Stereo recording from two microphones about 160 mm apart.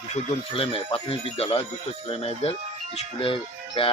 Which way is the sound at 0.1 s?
35° left (ahead or behind).